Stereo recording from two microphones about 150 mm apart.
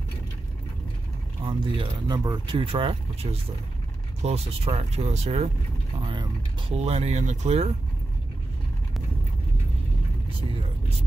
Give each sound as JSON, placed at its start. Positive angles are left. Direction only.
{"t": 1.4, "sound": "speech", "side_deg": -30}